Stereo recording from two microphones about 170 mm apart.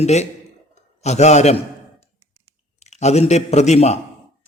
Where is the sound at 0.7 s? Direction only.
40° left (ahead or behind).